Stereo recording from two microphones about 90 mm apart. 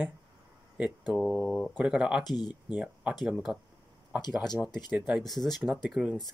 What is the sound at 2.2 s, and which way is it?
Speech, 50° left (ahead or behind).